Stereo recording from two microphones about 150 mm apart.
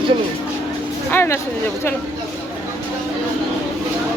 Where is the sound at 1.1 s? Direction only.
15° left (ahead or behind).